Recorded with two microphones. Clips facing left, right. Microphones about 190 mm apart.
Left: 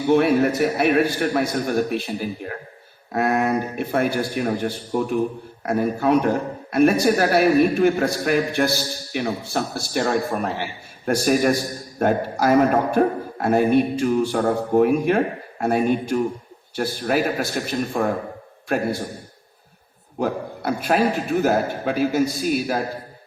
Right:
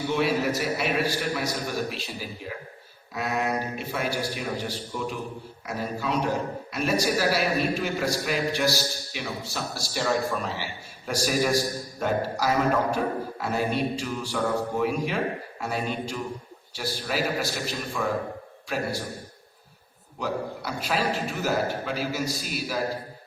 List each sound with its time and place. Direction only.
0.1 s a woman's voice: 55° left (ahead or behind)
20.1 s a man's voice: 55° left (ahead or behind)